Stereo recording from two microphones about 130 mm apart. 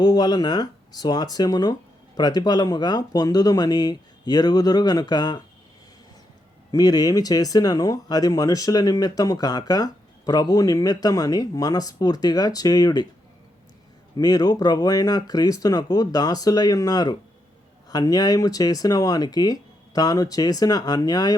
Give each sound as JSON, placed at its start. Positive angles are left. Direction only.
{"t": 0.0, "sound": "speech", "side_deg": 30}
{"t": 6.7, "sound": "speech", "side_deg": 30}
{"t": 14.2, "sound": "speech", "side_deg": 30}